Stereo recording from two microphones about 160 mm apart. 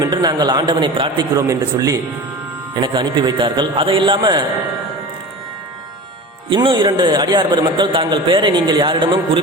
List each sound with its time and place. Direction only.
0.0 s a man's voice: 25° right (ahead or behind)
6.5 s a man's voice: 30° right (ahead or behind)